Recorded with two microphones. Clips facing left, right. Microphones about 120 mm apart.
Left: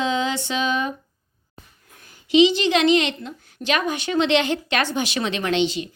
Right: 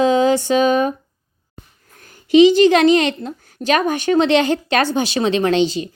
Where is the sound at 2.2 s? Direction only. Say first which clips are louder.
Right 7 dB; 45° right (ahead or behind).